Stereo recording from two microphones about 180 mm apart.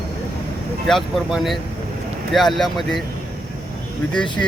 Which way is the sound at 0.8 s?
Centre (ahead or behind).